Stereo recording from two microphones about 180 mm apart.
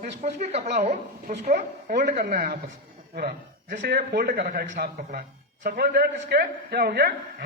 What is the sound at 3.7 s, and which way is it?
A man's voice, 45° right (ahead or behind).